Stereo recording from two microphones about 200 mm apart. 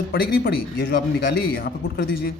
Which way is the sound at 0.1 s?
50° left (ahead or behind).